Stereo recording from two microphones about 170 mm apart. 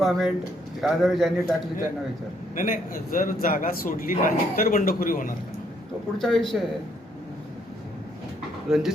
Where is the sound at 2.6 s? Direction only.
55° left (ahead or behind).